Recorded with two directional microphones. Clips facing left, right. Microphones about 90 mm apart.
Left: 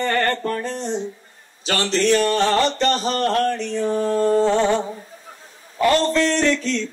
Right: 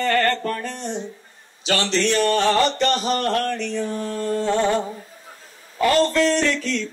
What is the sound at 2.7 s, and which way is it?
Mantra, 35° left (ahead or behind).